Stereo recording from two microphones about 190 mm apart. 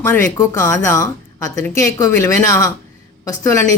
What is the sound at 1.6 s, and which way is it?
Speech, 15° left (ahead or behind).